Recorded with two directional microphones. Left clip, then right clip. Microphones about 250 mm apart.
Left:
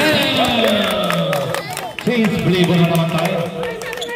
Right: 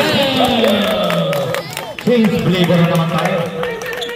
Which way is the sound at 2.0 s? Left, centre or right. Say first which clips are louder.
Right 4 dB; left.